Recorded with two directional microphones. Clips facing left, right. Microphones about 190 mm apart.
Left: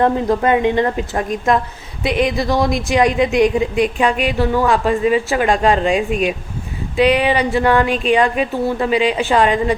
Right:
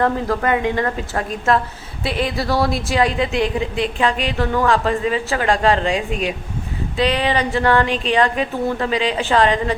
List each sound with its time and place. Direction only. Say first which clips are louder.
0.0 s a woman's voice: left 4 dB; 20° left (ahead or behind)